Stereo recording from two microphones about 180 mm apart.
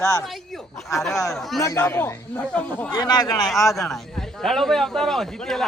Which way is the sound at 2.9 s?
20° left (ahead or behind).